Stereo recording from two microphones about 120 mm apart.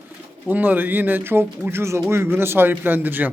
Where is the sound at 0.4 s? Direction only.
15° right (ahead or behind).